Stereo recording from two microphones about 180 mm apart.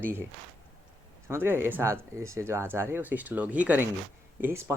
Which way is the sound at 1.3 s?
10° right (ahead or behind).